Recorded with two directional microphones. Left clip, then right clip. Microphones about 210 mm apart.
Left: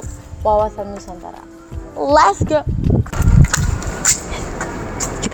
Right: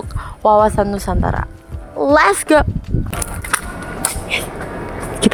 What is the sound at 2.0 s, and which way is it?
Speech, 45° right (ahead or behind).